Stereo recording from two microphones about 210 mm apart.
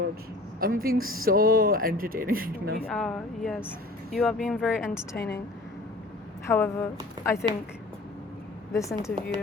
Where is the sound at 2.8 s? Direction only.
Centre (ahead or behind).